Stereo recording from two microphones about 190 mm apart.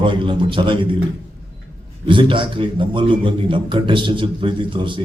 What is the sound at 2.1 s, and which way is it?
A man's voice, 25° right (ahead or behind).